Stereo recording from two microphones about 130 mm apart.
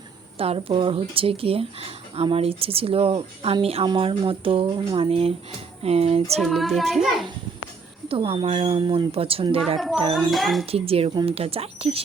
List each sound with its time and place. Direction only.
0.3 s speech: 50° right (ahead or behind)
6.4 s child singing: centre (ahead or behind)
8.0 s speech: 45° right (ahead or behind)
9.7 s child singing: centre (ahead or behind)
10.7 s speech: 50° right (ahead or behind)